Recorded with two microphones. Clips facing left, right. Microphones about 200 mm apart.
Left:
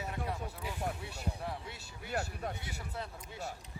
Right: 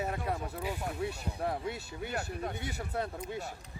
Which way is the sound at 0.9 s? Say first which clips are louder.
Right 6 dB; 75° right (ahead or behind).